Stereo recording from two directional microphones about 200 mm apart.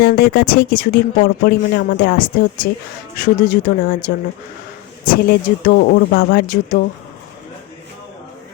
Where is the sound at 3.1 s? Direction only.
45° left (ahead or behind).